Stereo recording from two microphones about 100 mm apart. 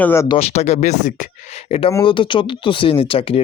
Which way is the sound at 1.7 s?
75° left (ahead or behind).